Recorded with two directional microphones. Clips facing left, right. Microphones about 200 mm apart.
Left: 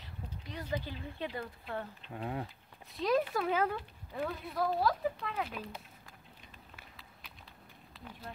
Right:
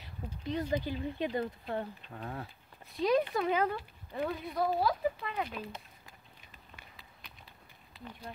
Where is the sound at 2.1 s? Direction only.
15° left (ahead or behind).